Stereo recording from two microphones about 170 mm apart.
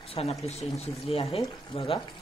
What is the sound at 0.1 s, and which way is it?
Speech, 35° left (ahead or behind).